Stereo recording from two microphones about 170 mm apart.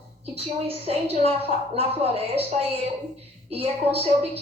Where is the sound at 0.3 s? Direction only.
35° right (ahead or behind).